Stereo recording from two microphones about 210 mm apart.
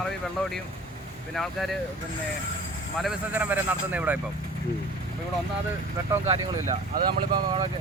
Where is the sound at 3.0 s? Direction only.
10° right (ahead or behind).